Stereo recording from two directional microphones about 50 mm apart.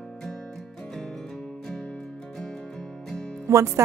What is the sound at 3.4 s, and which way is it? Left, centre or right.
Speech, right.